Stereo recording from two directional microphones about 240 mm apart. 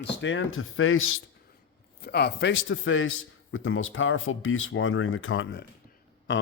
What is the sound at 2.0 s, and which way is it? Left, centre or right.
Speech, left.